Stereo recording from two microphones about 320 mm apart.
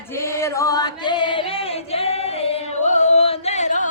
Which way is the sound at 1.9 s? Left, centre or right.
Centre.